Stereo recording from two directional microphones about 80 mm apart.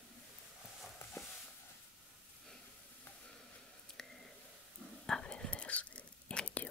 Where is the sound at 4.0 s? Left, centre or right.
Centre.